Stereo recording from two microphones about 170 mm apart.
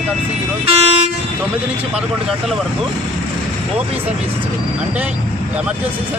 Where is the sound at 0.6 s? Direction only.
40° right (ahead or behind).